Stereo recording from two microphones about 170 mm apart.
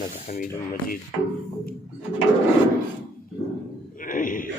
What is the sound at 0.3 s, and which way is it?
Speech, 55° left (ahead or behind).